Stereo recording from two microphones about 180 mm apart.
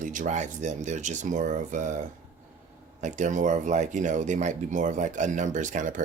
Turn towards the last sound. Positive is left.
turn(degrees=-45)  # may be behind; listen again after turning